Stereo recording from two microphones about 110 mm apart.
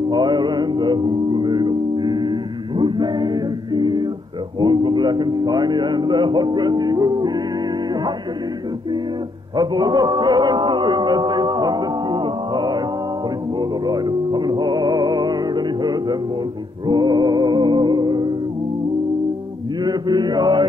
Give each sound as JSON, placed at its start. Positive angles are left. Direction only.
{"t": 0.1, "sound": "music", "side_deg": -45}
{"t": 4.6, "sound": "a man's voice", "side_deg": -45}
{"t": 9.6, "sound": "music", "side_deg": -40}
{"t": 19.8, "sound": "mantra", "side_deg": -40}